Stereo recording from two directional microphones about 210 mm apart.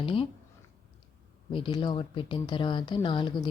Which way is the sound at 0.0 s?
25° left (ahead or behind).